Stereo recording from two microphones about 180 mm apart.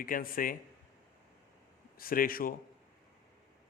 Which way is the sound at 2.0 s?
55° left (ahead or behind).